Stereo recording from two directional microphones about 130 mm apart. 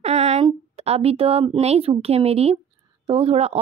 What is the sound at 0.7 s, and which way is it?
Speech, 50° right (ahead or behind).